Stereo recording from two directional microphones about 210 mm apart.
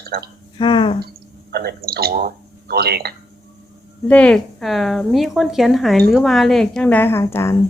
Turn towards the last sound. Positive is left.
turn(degrees=10)  # may be behind; listen again after turning